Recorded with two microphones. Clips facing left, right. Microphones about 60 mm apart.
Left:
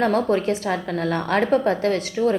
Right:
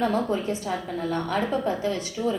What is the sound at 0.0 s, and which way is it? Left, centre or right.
A woman's voice, left.